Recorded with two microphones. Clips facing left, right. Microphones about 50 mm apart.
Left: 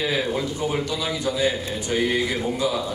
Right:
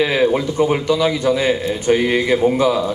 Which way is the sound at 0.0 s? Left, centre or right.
Right.